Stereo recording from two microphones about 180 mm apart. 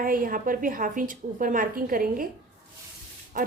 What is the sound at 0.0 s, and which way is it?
A woman's voice, 50° right (ahead or behind).